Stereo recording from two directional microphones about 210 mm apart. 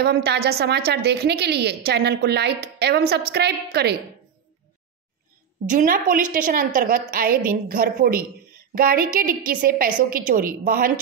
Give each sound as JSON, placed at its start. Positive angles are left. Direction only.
{"t": 0.0, "sound": "a woman's voice", "side_deg": -50}
{"t": 5.7, "sound": "a woman's voice", "side_deg": -40}